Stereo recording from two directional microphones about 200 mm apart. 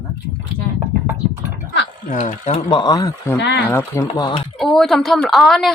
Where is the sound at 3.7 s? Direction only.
10° left (ahead or behind).